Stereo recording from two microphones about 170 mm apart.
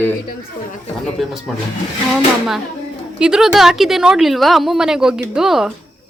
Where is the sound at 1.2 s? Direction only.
Centre (ahead or behind).